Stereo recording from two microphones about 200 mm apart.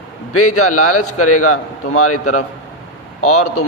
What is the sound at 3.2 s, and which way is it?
Speech, 90° left.